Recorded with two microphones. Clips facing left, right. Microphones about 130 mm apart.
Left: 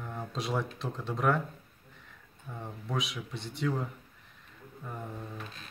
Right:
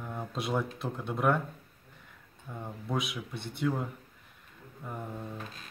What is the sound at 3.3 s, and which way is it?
Speech, 55° right (ahead or behind).